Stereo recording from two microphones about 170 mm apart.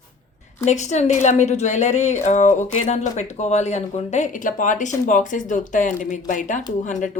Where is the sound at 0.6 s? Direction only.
45° left (ahead or behind).